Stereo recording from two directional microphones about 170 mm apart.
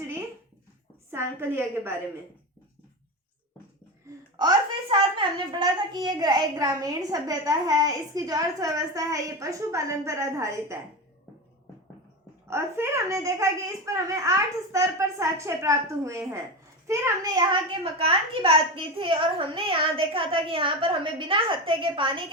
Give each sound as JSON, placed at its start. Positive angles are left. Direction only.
{"t": 1.1, "sound": "a child's voice", "side_deg": -15}
{"t": 4.4, "sound": "a woman's voice", "side_deg": -25}
{"t": 12.5, "sound": "a child's voice", "side_deg": -15}
{"t": 17.5, "sound": "a woman's voice", "side_deg": -30}